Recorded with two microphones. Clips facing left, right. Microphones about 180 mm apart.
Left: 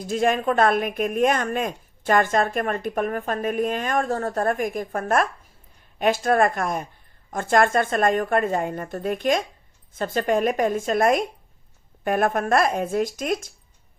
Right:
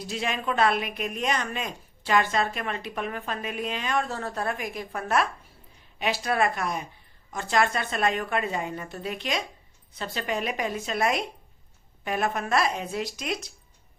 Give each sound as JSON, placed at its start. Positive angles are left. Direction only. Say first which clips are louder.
{"t": 0.0, "sound": "speech", "louder": "left 9 dB", "side_deg": 50}